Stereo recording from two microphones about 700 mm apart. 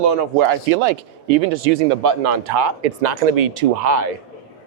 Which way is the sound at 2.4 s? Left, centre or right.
Right.